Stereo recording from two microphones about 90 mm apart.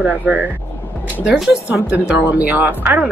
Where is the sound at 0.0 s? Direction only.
15° right (ahead or behind).